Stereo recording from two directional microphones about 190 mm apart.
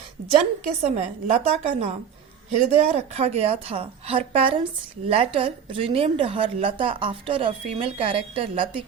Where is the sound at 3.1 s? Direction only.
35° right (ahead or behind).